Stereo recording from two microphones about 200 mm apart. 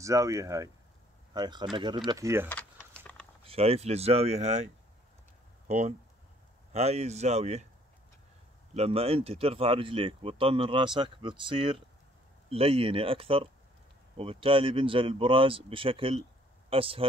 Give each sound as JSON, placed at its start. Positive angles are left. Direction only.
{"t": 0.0, "sound": "speech", "side_deg": -15}
{"t": 2.4, "sound": "a sound", "side_deg": 10}
{"t": 3.4, "sound": "speech", "side_deg": -30}
{"t": 5.7, "sound": "speech", "side_deg": -35}
{"t": 8.7, "sound": "speech", "side_deg": -30}